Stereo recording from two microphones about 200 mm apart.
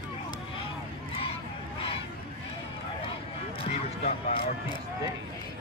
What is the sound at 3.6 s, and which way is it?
Music, 30° left (ahead or behind).